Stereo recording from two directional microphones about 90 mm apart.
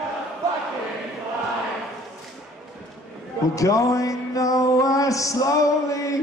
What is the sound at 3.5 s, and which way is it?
Music, 40° left (ahead or behind).